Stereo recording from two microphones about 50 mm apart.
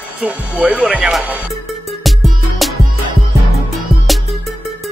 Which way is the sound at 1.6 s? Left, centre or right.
Centre.